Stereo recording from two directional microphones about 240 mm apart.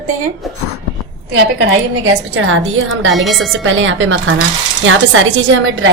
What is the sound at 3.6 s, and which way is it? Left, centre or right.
A woman's voice, right.